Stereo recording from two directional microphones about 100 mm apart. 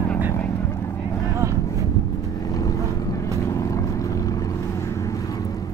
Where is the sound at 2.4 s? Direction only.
35° left (ahead or behind).